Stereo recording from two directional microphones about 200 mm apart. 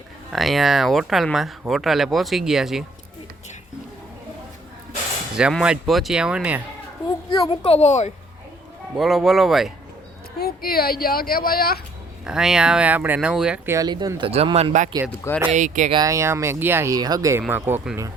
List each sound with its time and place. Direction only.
0.3 s speech: centre (ahead or behind)
5.4 s speech: 5° right (ahead or behind)
7.3 s a child's voice: 25° left (ahead or behind)
9.0 s speech: centre (ahead or behind)
10.4 s speech: 50° left (ahead or behind)
12.2 s speech: 5° right (ahead or behind)
13.7 s speech: 20° right (ahead or behind); by 15.9 s 40° right (ahead or behind)
15.9 s speech: 20° right (ahead or behind)